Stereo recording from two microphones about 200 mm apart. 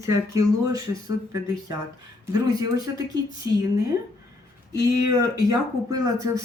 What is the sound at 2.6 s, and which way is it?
Speech, 20° right (ahead or behind).